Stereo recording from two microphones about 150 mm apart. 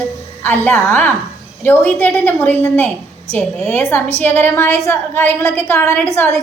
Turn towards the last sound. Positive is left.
turn(degrees=15)  # may be behind; listen again after turning